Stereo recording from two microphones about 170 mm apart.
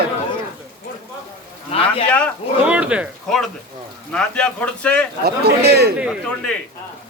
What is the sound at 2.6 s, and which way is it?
Speech, 5° right (ahead or behind).